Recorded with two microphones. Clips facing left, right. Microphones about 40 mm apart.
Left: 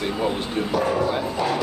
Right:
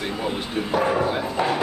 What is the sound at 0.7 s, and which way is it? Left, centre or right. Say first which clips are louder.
Speech: right 1 dB; right.